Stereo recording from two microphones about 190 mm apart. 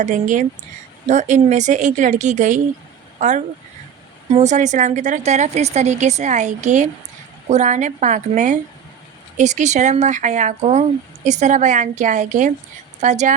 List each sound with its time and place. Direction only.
0.0 s speech: 40° right (ahead or behind)